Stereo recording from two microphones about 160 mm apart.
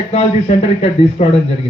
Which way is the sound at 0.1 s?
40° left (ahead or behind).